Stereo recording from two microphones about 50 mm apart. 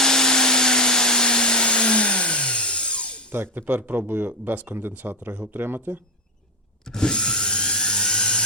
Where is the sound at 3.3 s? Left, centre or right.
Right.